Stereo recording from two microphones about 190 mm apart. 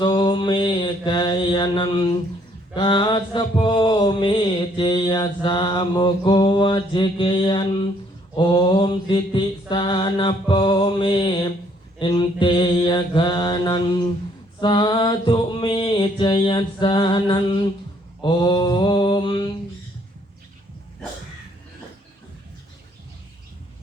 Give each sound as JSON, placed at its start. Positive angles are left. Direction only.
{"t": 0.0, "sound": "mantra", "side_deg": 25}